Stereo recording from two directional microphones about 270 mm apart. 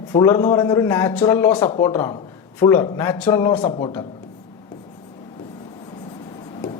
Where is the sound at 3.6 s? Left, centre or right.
Left.